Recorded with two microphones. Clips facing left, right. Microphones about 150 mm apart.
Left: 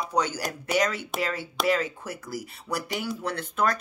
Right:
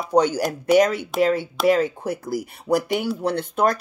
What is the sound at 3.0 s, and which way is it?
Speech, 35° right (ahead or behind).